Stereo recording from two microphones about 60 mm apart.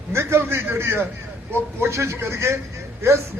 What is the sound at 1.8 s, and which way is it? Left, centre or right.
Speech, right.